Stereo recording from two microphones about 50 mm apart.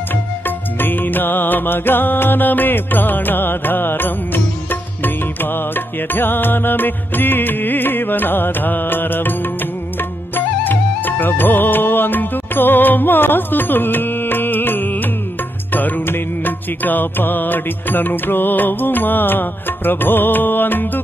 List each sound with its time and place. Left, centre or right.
0.7 s music: left